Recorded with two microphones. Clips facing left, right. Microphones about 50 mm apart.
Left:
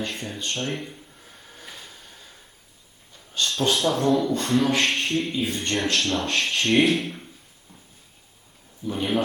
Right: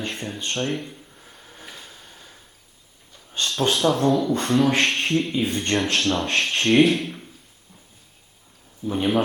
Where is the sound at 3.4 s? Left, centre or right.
Right.